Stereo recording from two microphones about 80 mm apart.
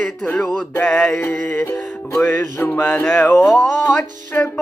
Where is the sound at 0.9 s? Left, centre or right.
Left.